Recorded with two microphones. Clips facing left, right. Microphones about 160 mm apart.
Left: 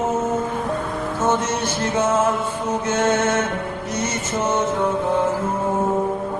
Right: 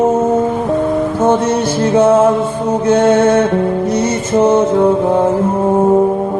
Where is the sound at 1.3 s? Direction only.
35° right (ahead or behind).